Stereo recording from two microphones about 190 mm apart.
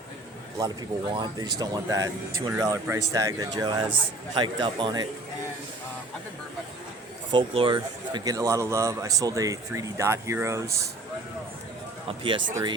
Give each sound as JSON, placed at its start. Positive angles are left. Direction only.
{"t": 1.1, "sound": "speech", "side_deg": -25}
{"t": 7.3, "sound": "speech", "side_deg": -25}
{"t": 12.0, "sound": "speech", "side_deg": -25}